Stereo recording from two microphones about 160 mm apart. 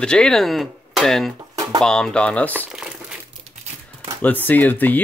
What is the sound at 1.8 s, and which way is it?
Speech, 5° left (ahead or behind).